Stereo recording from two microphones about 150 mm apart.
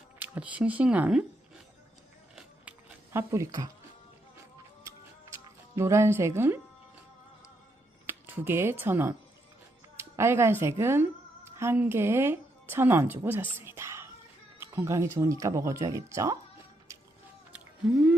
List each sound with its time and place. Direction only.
0.2 s speech: 10° right (ahead or behind)
3.1 s speech: 20° right (ahead or behind)
5.7 s speech: 20° right (ahead or behind)
8.0 s a woman's voice: 15° right (ahead or behind)